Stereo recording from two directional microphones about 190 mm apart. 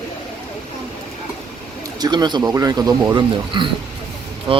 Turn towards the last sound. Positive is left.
turn(degrees=-25)  # may be behind; listen again after turning